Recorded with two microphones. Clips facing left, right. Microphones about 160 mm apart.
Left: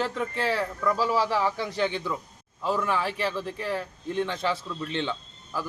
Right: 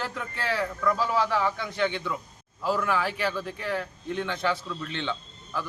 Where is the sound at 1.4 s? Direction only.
35° left (ahead or behind).